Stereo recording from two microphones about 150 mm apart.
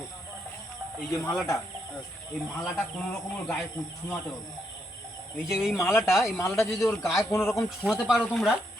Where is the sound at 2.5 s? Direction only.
Centre (ahead or behind).